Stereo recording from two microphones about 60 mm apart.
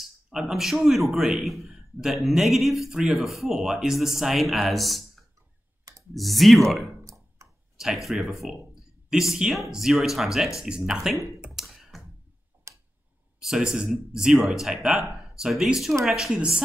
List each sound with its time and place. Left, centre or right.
0.0 s a man's voice: centre
7.4 s a sound: right
7.7 s a sound: centre
8.1 s a man's voice: centre
11.6 s clicking: centre
12.7 s tick-tock: right
13.8 s a man's voice: centre
16.3 s speech: centre